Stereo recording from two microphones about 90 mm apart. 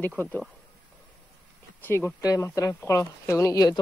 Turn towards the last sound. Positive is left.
turn(degrees=40)  # may be behind; listen again after turning